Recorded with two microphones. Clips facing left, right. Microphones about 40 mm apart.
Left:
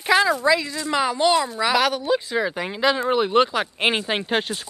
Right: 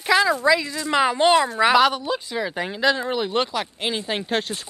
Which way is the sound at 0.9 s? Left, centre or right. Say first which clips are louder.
Right 2 dB; right.